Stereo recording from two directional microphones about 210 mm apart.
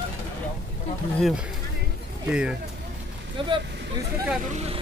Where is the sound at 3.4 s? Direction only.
25° right (ahead or behind).